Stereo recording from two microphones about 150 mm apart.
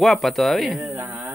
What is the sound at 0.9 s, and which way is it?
Speech, 10° right (ahead or behind).